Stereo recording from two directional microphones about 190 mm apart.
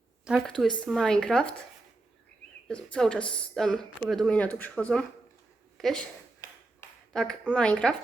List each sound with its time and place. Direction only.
0.3 s speech: centre (ahead or behind)
2.6 s speech: 5° left (ahead or behind)
7.1 s speech: 5° left (ahead or behind)